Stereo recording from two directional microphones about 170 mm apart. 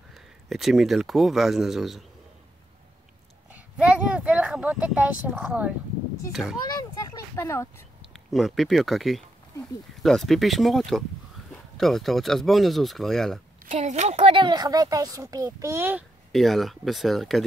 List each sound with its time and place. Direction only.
0.1 s speech: centre (ahead or behind)
3.5 s a sound: 10° right (ahead or behind)
6.3 s speech: centre (ahead or behind)
6.7 s a sound: 20° left (ahead or behind)
8.1 s speech: centre (ahead or behind)
13.7 s speech: 45° right (ahead or behind); by 16.1 s 10° right (ahead or behind)
16.3 s speech: centre (ahead or behind)